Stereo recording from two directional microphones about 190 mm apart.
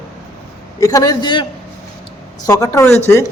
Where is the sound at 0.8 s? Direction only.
15° left (ahead or behind).